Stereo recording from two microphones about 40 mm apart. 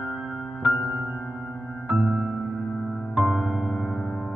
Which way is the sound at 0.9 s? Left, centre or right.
Right.